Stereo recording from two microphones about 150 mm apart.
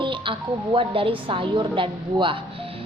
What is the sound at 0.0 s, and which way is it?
A woman's voice, 35° right (ahead or behind).